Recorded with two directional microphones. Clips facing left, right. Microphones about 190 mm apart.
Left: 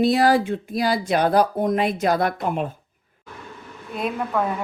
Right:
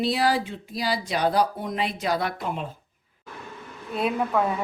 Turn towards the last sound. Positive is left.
turn(degrees=0)  # may be behind; listen again after turning